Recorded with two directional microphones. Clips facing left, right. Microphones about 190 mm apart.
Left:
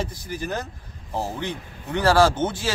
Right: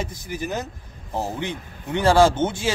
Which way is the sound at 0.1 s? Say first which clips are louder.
Right 1 dB; 20° right (ahead or behind).